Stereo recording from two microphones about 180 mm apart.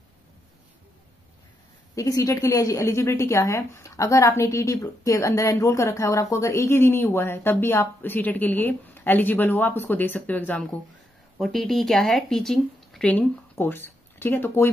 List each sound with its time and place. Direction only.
2.0 s speech: 20° left (ahead or behind)